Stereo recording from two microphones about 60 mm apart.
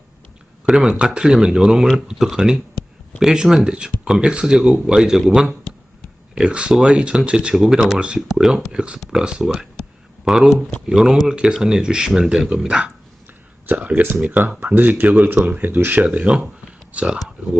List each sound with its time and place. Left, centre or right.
0.7 s speech: centre
6.3 s speech: centre
8.3 s speech: centre
13.7 s speech: right
16.0 s speech: centre